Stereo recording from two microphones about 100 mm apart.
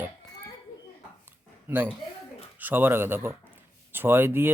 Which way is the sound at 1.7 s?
20° right (ahead or behind).